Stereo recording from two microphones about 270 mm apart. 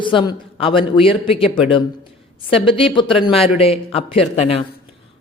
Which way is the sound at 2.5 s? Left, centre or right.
Centre.